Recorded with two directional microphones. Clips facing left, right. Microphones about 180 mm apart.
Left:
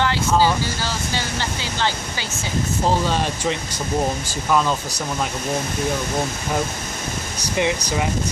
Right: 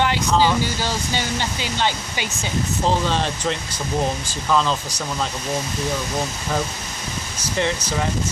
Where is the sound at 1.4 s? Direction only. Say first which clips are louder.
Right 1 dB; 20° right (ahead or behind).